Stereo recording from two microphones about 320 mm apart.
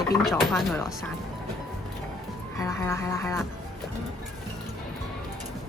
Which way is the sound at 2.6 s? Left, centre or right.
Centre.